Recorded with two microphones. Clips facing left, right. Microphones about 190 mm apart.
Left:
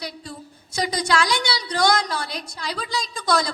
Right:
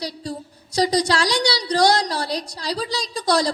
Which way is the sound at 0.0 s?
35° right (ahead or behind).